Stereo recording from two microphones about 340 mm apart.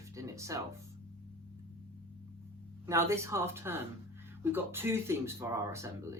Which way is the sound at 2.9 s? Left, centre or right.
Centre.